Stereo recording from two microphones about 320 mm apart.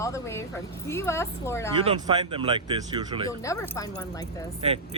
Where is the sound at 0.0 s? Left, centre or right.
Centre.